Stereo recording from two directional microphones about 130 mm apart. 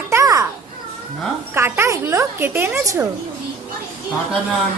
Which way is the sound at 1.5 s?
20° right (ahead or behind).